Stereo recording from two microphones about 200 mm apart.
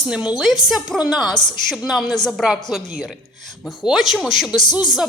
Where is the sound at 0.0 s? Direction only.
5° right (ahead or behind).